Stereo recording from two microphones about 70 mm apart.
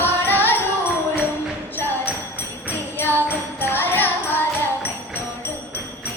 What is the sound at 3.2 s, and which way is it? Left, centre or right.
Music, left.